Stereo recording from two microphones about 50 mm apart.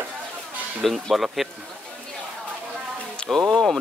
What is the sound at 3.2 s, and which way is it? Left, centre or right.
Speech, centre.